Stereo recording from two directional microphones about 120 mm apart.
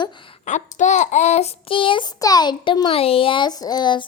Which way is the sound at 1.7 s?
45° left (ahead or behind).